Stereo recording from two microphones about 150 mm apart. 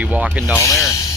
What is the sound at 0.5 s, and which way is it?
Speech, 20° left (ahead or behind).